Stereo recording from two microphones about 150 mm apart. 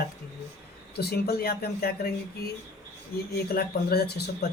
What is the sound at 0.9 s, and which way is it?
Speech, 90° left.